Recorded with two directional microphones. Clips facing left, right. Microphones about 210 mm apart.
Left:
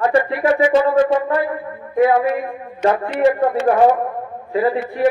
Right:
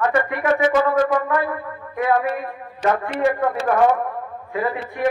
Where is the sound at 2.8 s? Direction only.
25° left (ahead or behind).